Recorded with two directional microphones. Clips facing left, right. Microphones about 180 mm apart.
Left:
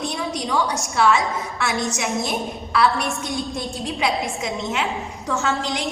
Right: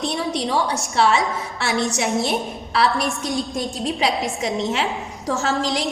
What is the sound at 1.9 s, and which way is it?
A woman's voice, 35° right (ahead or behind).